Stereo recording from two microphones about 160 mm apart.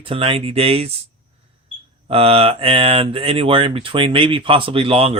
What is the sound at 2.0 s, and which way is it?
Speech, 35° right (ahead or behind).